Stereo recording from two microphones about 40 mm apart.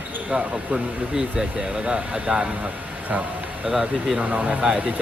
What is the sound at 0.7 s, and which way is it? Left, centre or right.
Speech, right.